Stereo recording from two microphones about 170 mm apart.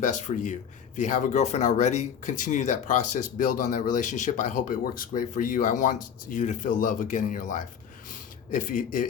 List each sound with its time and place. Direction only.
0.0 s speech: 45° left (ahead or behind)